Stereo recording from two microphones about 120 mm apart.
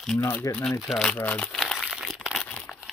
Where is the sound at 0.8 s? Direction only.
Centre (ahead or behind).